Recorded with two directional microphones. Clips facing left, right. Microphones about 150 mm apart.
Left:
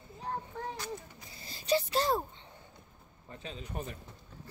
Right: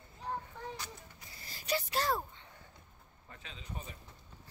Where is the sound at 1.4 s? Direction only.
25° left (ahead or behind).